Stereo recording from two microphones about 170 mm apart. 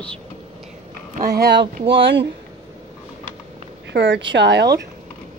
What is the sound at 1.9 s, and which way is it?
Speech, 90° right.